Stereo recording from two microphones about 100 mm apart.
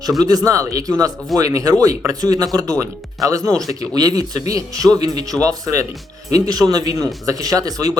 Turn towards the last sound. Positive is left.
turn(degrees=-40)  # may be behind; listen again after turning